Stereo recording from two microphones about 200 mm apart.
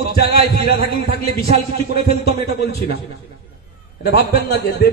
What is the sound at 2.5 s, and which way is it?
Speech, 55° left (ahead or behind).